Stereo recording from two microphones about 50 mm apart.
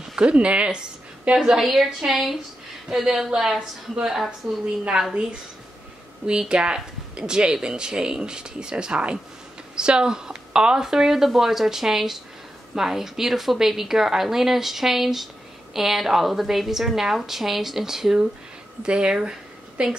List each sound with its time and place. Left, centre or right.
0.2 s a woman's voice: right
6.5 s a woman's voice: centre
18.8 s speech: centre